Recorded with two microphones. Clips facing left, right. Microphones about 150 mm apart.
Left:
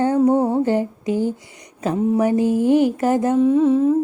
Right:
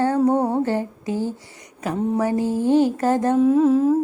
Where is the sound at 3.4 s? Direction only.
Centre (ahead or behind).